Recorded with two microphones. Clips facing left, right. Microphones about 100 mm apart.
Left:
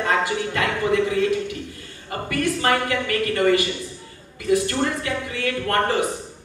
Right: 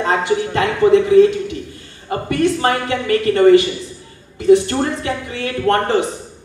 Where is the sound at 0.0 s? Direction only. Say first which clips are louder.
Right 5 dB; 25° right (ahead or behind).